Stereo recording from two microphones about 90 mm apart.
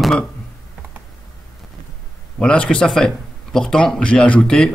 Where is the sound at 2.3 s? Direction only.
10° left (ahead or behind).